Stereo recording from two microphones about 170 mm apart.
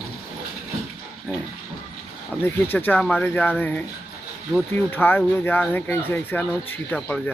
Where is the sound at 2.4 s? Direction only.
10° left (ahead or behind).